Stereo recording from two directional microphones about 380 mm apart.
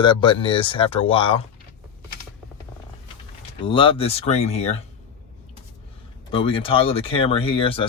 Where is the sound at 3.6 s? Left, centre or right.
Centre.